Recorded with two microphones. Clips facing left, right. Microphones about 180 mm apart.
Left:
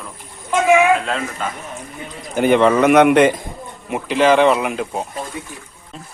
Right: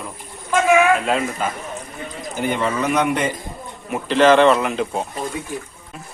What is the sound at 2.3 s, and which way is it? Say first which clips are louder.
Speech: left 9 dB; 70° left (ahead or behind).